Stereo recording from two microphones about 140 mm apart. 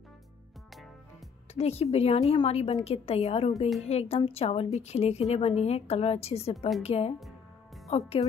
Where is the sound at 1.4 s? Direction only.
45° left (ahead or behind).